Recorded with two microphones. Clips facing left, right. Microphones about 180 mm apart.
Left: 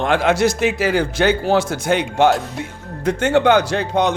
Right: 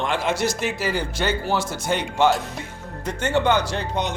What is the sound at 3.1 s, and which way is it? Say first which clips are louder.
Speech: left 6 dB; 80° left.